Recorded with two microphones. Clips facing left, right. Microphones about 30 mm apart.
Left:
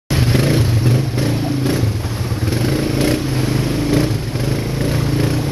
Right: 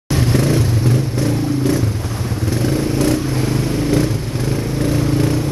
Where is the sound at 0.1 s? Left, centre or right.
Left.